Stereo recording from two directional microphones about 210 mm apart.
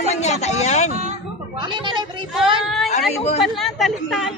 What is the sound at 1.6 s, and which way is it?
Speech, 20° right (ahead or behind).